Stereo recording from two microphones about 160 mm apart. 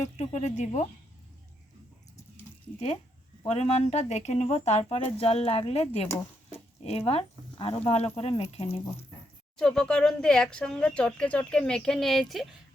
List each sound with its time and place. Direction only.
0.2 s speech: 45° left (ahead or behind)
3.5 s speech: 40° left (ahead or behind)
9.6 s speech: 5° left (ahead or behind)